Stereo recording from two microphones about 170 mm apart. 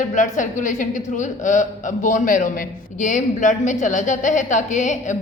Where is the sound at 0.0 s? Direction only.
50° left (ahead or behind).